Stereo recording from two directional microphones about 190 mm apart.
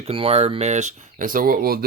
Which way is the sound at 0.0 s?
30° right (ahead or behind).